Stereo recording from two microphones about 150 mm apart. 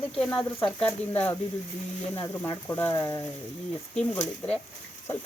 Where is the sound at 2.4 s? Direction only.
10° left (ahead or behind).